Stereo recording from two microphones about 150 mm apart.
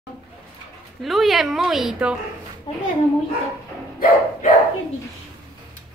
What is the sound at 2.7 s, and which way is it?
Speech, 30° left (ahead or behind).